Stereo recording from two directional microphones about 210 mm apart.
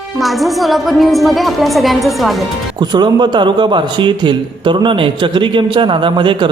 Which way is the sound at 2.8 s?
20° right (ahead or behind).